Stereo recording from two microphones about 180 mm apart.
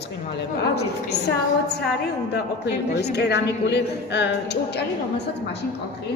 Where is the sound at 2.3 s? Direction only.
65° left (ahead or behind).